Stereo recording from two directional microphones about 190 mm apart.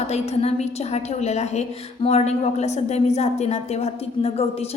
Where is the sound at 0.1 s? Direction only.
35° left (ahead or behind).